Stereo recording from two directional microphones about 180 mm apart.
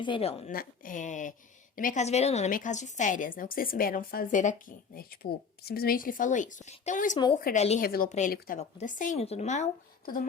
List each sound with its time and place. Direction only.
0.0 s speech: 30° left (ahead or behind)
0.5 s a woman's voice: 50° left (ahead or behind)
4.9 s a woman's voice: 55° left (ahead or behind); by 7.8 s 40° left (ahead or behind)
7.8 s a woman's voice: 55° left (ahead or behind); by 9.6 s 40° left (ahead or behind)